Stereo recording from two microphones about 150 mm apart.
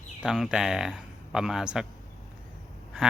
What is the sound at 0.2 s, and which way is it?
A man's voice, 5° right (ahead or behind).